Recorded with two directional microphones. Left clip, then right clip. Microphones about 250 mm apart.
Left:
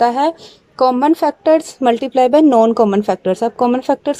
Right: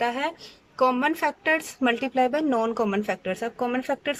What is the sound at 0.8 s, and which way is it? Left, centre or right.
A woman's voice, centre.